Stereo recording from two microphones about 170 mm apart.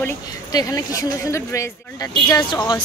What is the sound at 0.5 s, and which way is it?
Speech, 20° left (ahead or behind).